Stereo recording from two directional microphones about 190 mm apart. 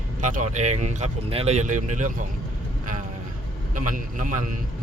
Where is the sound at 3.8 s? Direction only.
45° right (ahead or behind).